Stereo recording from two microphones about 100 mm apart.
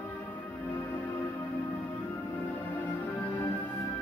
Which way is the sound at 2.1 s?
20° left (ahead or behind).